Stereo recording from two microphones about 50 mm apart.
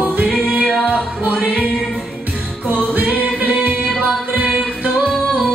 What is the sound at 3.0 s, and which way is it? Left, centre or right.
Choir, right.